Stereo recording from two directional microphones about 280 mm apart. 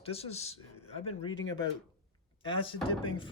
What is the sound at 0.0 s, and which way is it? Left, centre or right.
Speech, left.